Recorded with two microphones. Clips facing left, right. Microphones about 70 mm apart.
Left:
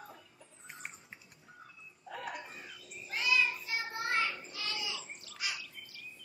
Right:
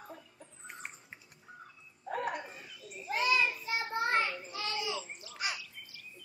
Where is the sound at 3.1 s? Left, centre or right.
Right.